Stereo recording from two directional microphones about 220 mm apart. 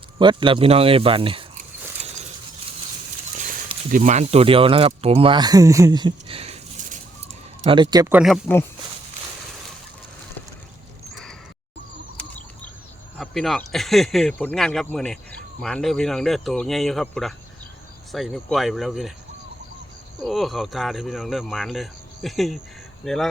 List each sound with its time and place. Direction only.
0.2 s speech: 20° right (ahead or behind)
3.9 s speech: 35° right (ahead or behind); by 8.4 s 5° right (ahead or behind)
13.1 s speech: centre (ahead or behind)
20.2 s speech: centre (ahead or behind)